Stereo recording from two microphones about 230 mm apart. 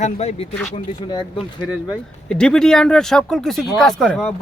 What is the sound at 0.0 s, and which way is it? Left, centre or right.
Speech, left.